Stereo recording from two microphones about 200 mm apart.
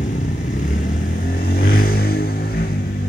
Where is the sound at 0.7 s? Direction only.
45° left (ahead or behind).